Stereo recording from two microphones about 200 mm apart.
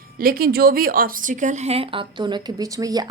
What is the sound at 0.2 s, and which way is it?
Speech, 45° right (ahead or behind).